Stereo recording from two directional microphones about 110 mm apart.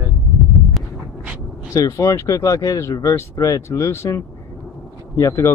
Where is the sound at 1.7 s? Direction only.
30° left (ahead or behind).